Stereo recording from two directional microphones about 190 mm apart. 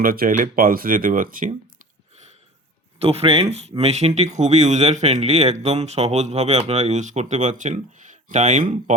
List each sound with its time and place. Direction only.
0.0 s speech: 50° right (ahead or behind)
3.0 s speech: 30° right (ahead or behind)